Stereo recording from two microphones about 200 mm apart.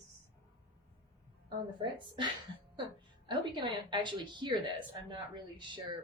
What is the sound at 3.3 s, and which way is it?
A woman's voice, 25° right (ahead or behind).